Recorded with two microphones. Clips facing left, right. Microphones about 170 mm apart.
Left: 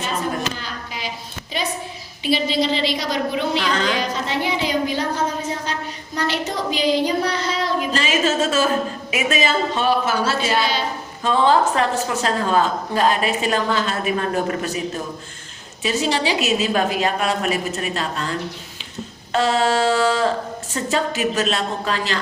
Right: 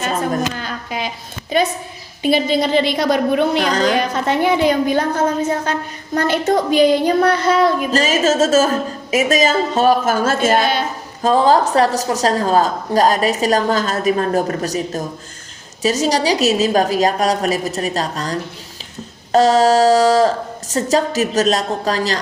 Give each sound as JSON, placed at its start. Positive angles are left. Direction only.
{"t": 0.0, "sound": "speech", "side_deg": -45}
{"t": 3.7, "sound": "a woman's voice", "side_deg": -40}
{"t": 3.9, "sound": "speech", "side_deg": -55}
{"t": 11.2, "sound": "a woman's voice", "side_deg": -40}